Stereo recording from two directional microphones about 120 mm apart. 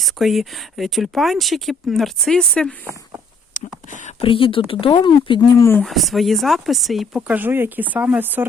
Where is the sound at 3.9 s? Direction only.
90° left.